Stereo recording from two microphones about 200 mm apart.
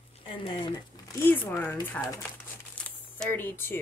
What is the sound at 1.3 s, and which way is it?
Speech, 10° left (ahead or behind).